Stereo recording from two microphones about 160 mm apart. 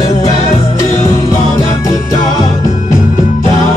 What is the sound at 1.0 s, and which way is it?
Music, 20° left (ahead or behind).